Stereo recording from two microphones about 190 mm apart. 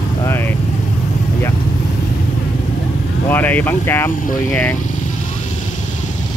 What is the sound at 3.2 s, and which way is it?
Speech, 10° left (ahead or behind).